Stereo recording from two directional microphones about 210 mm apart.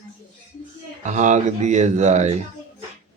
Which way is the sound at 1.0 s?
35° right (ahead or behind).